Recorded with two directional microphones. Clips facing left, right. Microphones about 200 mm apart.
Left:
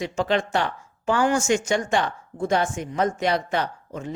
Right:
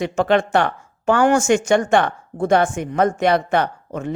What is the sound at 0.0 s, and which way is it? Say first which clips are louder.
Speech: right 6 dB; 60° right (ahead or behind).